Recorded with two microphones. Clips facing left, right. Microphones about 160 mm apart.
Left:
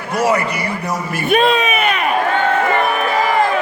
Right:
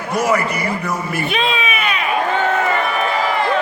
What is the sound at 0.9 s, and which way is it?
A man's voice, 45° left (ahead or behind).